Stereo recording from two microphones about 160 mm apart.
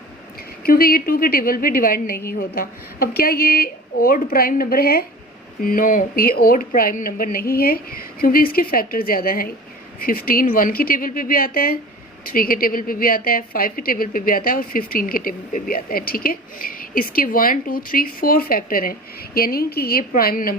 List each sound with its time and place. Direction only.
0.6 s a woman's voice: 65° left (ahead or behind)